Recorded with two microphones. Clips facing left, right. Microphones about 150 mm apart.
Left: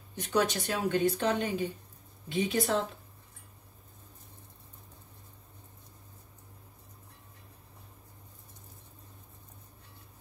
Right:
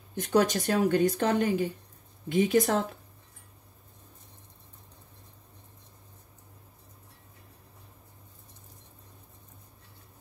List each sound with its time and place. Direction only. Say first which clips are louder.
0.1 s speech: right 4 dB; 50° right (ahead or behind)